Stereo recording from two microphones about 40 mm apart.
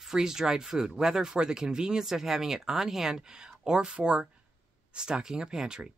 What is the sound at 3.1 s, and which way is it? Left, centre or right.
Speech, centre.